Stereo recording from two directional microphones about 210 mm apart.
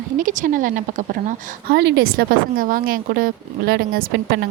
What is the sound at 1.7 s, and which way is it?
Speech, 50° right (ahead or behind).